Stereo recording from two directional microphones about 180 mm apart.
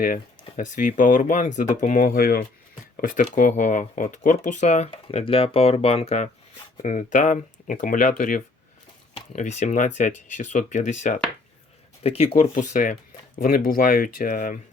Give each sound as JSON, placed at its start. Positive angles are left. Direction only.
{"t": 0.0, "sound": "speech", "side_deg": 50}